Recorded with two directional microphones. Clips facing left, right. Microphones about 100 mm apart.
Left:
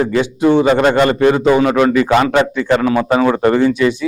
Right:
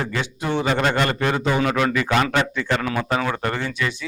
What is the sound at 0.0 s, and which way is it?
A man's voice, 15° left (ahead or behind).